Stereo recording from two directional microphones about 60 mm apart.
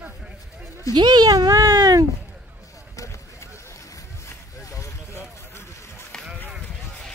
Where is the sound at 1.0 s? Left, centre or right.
Right.